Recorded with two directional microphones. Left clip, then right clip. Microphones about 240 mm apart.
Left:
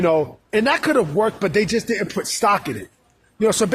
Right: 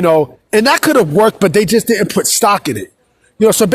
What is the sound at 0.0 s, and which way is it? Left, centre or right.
Speech, right.